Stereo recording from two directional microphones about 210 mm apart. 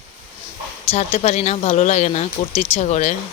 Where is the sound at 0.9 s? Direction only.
30° left (ahead or behind).